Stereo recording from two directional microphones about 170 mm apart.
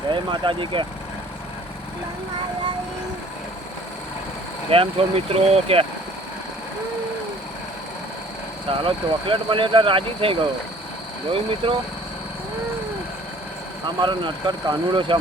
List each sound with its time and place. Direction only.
0.1 s speech: 30° right (ahead or behind)
4.7 s speech: 35° right (ahead or behind)
8.8 s speech: 30° right (ahead or behind)
13.8 s speech: 25° right (ahead or behind)